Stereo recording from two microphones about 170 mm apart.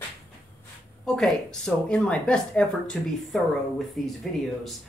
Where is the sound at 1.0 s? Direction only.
Centre (ahead or behind).